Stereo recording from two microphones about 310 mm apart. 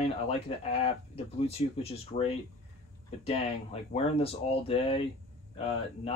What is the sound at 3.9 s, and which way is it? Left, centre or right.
Speech, centre.